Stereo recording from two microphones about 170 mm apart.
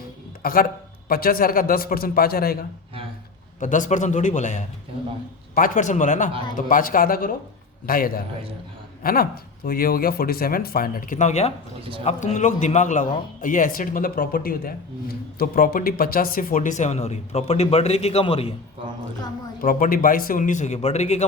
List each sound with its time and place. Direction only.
0.4 s speech: 60° left (ahead or behind)
3.6 s a man's voice: 50° left (ahead or behind)
19.6 s a man's voice: 55° left (ahead or behind); by 21.2 s 40° left (ahead or behind)